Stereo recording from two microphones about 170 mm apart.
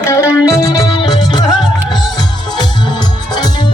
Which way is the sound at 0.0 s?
15° left (ahead or behind).